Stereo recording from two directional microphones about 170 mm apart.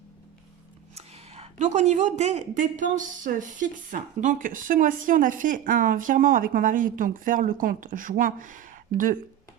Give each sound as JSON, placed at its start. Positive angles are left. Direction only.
{"t": 0.9, "sound": "speech", "side_deg": -35}